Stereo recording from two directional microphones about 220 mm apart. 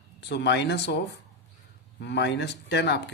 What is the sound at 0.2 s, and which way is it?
Speech, 50° left (ahead or behind).